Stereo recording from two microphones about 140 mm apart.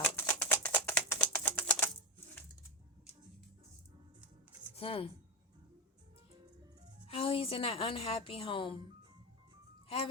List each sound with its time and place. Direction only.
0.0 s typewriter: 10° left (ahead or behind)
4.7 s a sound: 40° left (ahead or behind)
7.1 s a woman's voice: 40° left (ahead or behind)